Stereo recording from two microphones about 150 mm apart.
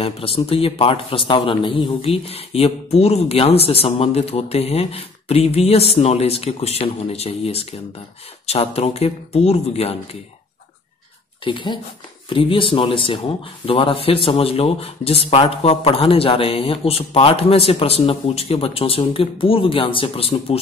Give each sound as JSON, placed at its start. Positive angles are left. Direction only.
{"t": 0.0, "sound": "speech", "side_deg": 40}
{"t": 11.4, "sound": "speech", "side_deg": 30}